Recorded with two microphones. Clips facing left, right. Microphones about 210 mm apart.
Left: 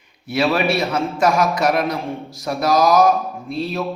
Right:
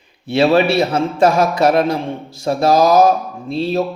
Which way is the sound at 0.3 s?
30° right (ahead or behind).